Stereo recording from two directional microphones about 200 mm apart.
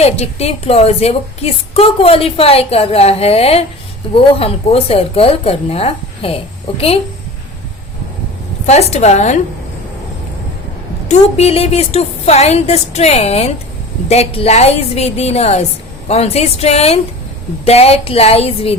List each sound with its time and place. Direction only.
0.0 s a woman's voice: 30° left (ahead or behind)
8.6 s a woman's voice: 35° left (ahead or behind)
11.1 s a woman's voice: 30° left (ahead or behind)